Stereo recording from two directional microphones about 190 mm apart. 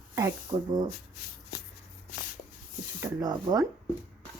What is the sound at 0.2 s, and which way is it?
Speech, 20° right (ahead or behind).